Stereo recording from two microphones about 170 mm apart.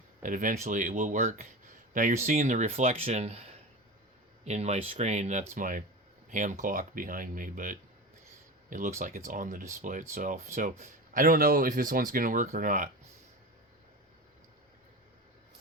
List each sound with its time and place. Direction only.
0.2 s speech: 50° right (ahead or behind)